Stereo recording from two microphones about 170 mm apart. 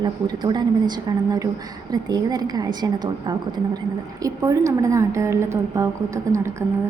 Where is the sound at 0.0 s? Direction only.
25° right (ahead or behind).